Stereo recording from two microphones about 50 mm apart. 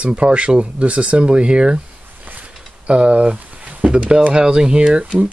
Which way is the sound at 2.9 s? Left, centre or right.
Right.